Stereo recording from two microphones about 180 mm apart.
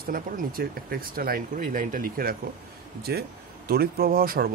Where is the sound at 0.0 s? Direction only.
50° right (ahead or behind).